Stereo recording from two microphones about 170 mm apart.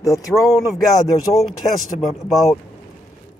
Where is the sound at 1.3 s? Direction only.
Centre (ahead or behind).